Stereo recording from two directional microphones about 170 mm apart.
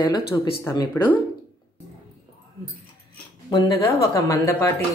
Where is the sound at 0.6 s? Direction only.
20° left (ahead or behind).